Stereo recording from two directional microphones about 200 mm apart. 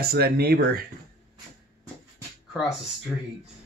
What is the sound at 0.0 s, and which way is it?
Speech, 50° right (ahead or behind).